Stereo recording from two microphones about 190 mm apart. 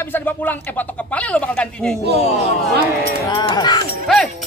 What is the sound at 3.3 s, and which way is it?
Speech, 20° left (ahead or behind).